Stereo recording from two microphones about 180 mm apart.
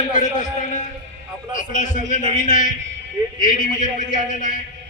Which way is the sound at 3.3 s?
45° left (ahead or behind).